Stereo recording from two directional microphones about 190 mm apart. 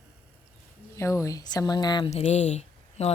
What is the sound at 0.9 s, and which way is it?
Speech, 15° left (ahead or behind).